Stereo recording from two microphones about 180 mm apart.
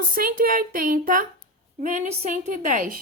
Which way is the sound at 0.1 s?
55° right (ahead or behind).